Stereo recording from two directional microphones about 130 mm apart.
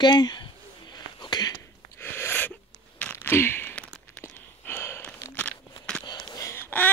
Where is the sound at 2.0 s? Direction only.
15° left (ahead or behind).